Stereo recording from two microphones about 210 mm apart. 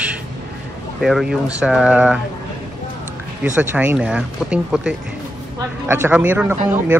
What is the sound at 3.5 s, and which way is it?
Speech, 5° right (ahead or behind).